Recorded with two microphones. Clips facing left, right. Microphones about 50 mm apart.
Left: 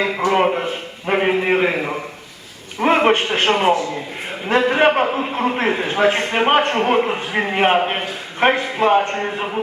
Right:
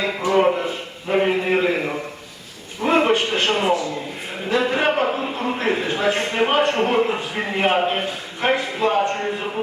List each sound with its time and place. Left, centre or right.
0.2 s a man's voice: left
2.8 s a man's voice: left